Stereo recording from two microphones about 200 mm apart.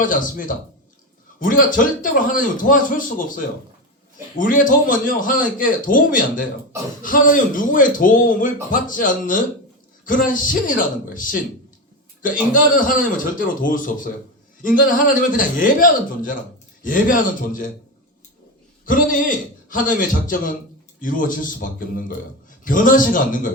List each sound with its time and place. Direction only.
0.0 s a man's voice: 40° left (ahead or behind)
18.9 s a man's voice: 40° left (ahead or behind)